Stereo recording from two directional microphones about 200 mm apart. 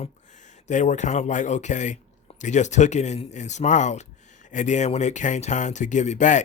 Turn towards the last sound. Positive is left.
turn(degrees=35)  # may be behind; listen again after turning